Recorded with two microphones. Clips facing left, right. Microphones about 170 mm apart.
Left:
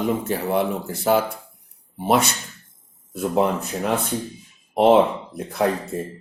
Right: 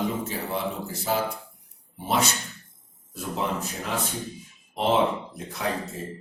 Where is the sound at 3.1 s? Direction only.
60° left (ahead or behind).